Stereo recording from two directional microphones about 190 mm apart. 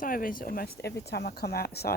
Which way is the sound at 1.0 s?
60° left (ahead or behind).